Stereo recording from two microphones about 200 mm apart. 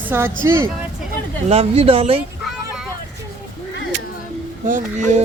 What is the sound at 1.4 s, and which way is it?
Speech, 30° right (ahead or behind).